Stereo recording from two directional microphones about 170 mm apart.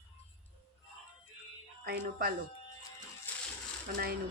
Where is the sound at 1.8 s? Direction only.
60° right (ahead or behind).